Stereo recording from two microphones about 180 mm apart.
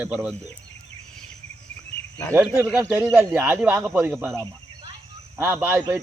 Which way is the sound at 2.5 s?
10° right (ahead or behind).